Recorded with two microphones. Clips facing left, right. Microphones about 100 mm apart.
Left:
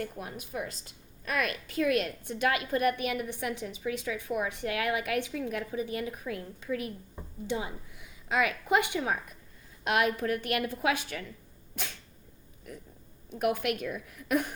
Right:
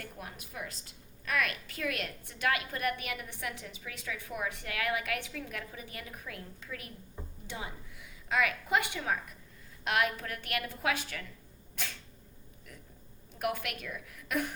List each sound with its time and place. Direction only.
0.2 s a woman's voice: 25° left (ahead or behind)
13.5 s a woman's voice: 25° left (ahead or behind)